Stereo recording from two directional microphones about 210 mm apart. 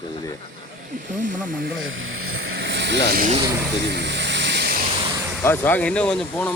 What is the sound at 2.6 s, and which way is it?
Vehicle, 55° right (ahead or behind).